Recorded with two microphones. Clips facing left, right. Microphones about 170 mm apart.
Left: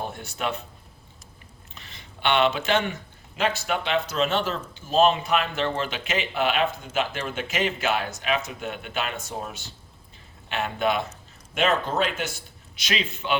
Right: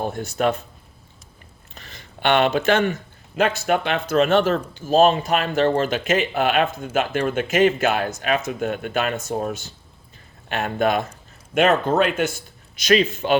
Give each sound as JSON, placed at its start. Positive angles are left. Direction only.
{"t": 0.0, "sound": "speech", "side_deg": -45}
{"t": 1.7, "sound": "a sound", "side_deg": -45}
{"t": 3.3, "sound": "speech", "side_deg": -50}